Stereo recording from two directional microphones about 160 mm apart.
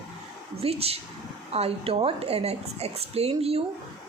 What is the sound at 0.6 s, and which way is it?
A woman's voice, 40° right (ahead or behind).